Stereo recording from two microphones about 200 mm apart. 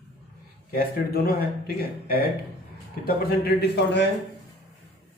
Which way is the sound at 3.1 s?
50° left (ahead or behind).